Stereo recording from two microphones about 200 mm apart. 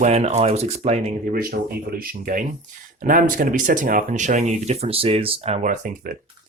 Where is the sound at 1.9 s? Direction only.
40° right (ahead or behind).